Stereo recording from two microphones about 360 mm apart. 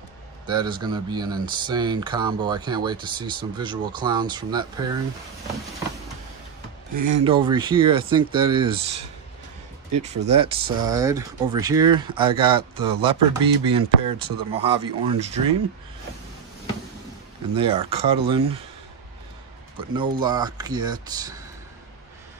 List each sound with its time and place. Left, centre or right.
0.5 s speech: centre
7.0 s speech: centre
10.2 s speech: centre
17.6 s speech: centre
19.9 s speech: centre